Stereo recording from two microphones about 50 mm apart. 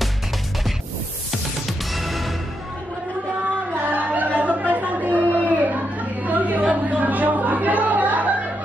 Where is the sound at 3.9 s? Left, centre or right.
Right.